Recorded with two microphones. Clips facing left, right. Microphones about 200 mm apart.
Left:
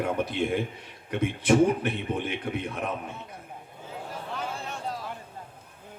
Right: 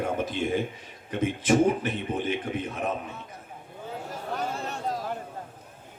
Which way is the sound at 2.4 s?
45° right (ahead or behind).